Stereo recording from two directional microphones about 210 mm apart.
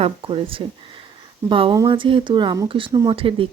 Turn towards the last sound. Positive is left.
turn(degrees=-25)  # may be behind; listen again after turning